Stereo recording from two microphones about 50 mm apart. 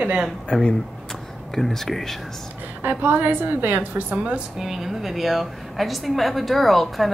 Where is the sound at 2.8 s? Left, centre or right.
Right.